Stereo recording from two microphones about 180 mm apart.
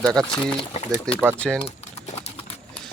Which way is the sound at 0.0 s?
20° right (ahead or behind).